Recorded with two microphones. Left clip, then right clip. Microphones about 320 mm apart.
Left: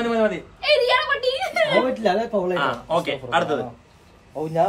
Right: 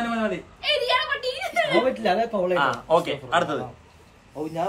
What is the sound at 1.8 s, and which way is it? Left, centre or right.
Speech, centre.